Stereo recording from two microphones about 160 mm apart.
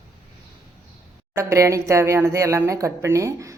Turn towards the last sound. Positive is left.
turn(degrees=-20)  # may be behind; listen again after turning